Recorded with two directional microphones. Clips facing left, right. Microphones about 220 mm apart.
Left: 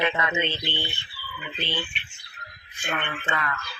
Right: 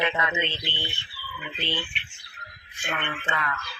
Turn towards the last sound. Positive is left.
turn(degrees=40)  # may be behind; listen again after turning